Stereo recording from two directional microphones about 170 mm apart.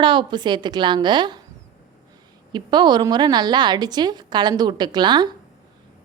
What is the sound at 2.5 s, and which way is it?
A woman's voice, 25° right (ahead or behind).